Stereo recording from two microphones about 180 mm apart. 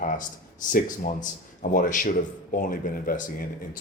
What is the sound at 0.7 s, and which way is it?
Speech, 50° left (ahead or behind).